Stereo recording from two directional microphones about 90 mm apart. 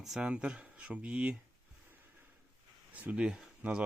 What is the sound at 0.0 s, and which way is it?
Speech, 5° right (ahead or behind).